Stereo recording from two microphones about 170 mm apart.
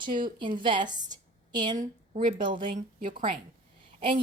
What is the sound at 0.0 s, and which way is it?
Speech, 30° right (ahead or behind).